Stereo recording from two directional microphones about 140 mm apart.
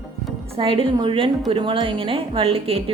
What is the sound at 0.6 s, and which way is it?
A woman's voice, 40° right (ahead or behind).